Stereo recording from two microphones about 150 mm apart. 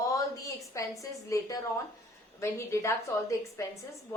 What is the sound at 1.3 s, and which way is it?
A woman's voice, 20° left (ahead or behind).